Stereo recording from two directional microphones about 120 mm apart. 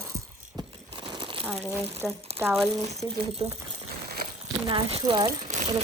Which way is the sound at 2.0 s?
Centre (ahead or behind).